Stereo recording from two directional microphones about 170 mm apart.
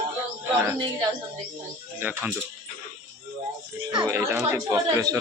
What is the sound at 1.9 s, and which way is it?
Speech, 10° right (ahead or behind).